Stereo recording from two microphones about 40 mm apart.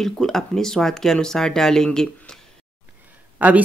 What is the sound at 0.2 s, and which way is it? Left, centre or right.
Speech, centre.